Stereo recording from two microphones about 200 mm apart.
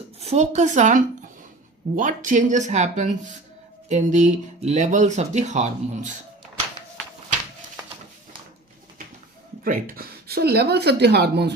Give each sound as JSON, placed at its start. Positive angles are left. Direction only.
{"t": 0.2, "sound": "speech", "side_deg": -35}
{"t": 9.6, "sound": "speech", "side_deg": -45}